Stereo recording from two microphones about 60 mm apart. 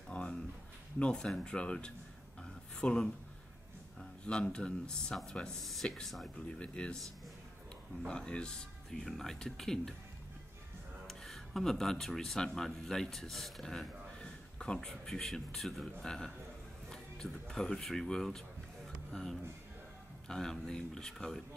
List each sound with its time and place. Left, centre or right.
0.1 s a sound: centre
0.9 s speech: centre
6.3 s speech: centre
8.1 s speech: centre
11.1 s speech: centre